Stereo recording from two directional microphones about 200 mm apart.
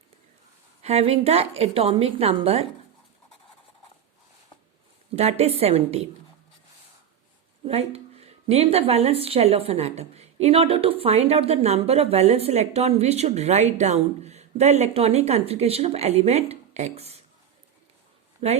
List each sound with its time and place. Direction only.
0.8 s a woman's voice: 30° right (ahead or behind)
5.1 s a woman's voice: 30° right (ahead or behind)
7.6 s a woman's voice: 30° right (ahead or behind)
18.3 s speech: 30° right (ahead or behind)